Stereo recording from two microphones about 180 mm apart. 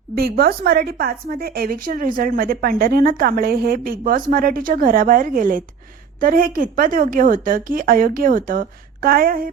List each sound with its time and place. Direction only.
0.2 s a woman's voice: 60° right (ahead or behind)